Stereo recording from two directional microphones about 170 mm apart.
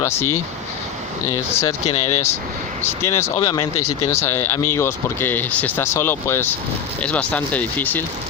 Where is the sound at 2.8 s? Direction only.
15° left (ahead or behind).